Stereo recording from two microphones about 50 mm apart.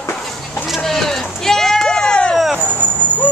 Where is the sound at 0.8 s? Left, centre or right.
Centre.